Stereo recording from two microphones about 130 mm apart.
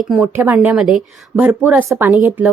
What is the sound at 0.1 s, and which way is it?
A woman's voice, 10° right (ahead or behind).